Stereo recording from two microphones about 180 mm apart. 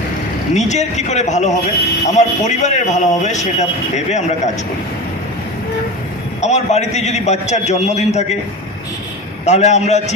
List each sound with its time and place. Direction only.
0.6 s a man's voice: 40° left (ahead or behind)
6.4 s a man's voice: 40° left (ahead or behind)
9.5 s a man's voice: 40° left (ahead or behind)